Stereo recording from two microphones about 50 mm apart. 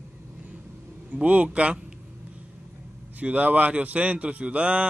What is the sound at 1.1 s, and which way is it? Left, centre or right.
Speech, right.